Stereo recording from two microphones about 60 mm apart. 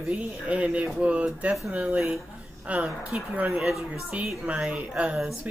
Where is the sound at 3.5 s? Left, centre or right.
Centre.